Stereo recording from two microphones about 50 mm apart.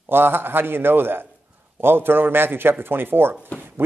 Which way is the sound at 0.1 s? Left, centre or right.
Right.